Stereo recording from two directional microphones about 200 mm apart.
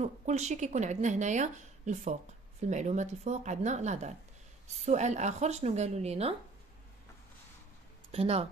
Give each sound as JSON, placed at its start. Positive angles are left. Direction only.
{"t": 0.0, "sound": "speech", "side_deg": -35}
{"t": 8.1, "sound": "speech", "side_deg": -30}